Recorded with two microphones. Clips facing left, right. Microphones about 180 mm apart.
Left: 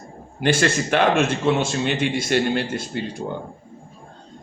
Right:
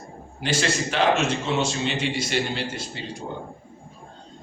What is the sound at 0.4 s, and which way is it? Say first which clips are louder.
A man's voice: left 5 dB; 55° left (ahead or behind).